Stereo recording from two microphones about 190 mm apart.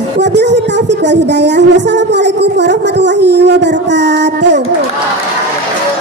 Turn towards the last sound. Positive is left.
turn(degrees=-65)  # may be behind; listen again after turning